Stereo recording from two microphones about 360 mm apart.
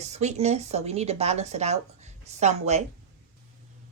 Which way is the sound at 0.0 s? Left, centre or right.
Centre.